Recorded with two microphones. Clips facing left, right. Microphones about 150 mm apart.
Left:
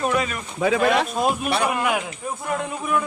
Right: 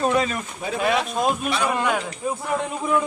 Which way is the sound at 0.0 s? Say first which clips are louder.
Right 2 dB; 25° right (ahead or behind).